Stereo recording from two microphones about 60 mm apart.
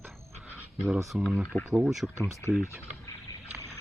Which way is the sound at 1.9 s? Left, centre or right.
Centre.